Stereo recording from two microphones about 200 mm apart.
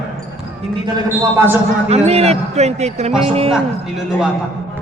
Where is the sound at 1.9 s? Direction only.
30° right (ahead or behind).